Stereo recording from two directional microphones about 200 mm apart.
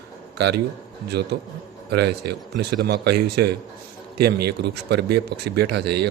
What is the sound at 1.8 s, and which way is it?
A man's voice, 55° right (ahead or behind).